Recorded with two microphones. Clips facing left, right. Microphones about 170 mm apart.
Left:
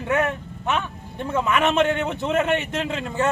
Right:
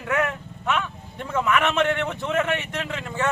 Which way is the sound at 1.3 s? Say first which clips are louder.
Left 1 dB; 20° left (ahead or behind).